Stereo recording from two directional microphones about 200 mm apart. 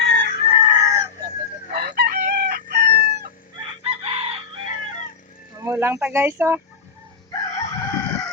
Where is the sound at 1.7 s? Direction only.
50° right (ahead or behind).